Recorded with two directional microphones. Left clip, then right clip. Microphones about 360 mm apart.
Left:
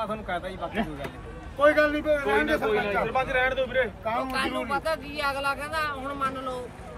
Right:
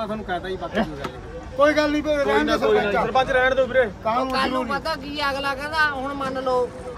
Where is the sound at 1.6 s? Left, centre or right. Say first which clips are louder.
Right 2 dB; right.